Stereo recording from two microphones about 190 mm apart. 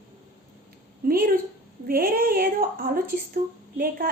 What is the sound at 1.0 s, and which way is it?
A woman's voice, 50° right (ahead or behind).